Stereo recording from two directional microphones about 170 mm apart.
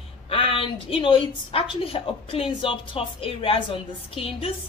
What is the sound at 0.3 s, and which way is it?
A woman's voice, 30° left (ahead or behind).